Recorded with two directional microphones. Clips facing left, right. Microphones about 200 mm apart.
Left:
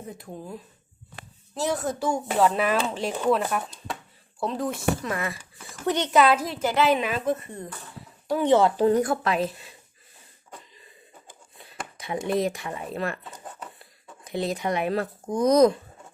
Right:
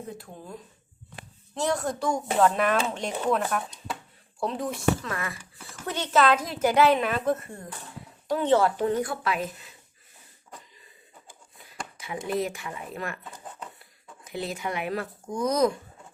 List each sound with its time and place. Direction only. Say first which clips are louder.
0.2 s a child's voice: left 4 dB; 10° left (ahead or behind)
5.0 s a child's voice: left 4 dB; 20° left (ahead or behind)
8.7 s speech: left 5 dB; 35° left (ahead or behind)
11.9 s speech: left 3 dB; 35° left (ahead or behind)
14.3 s speech: left 5 dB; 35° left (ahead or behind)